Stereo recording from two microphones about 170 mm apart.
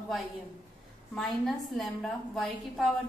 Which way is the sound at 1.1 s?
Centre (ahead or behind).